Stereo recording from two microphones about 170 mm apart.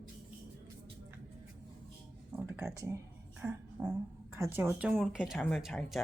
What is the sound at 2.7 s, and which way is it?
Speech, 20° right (ahead or behind).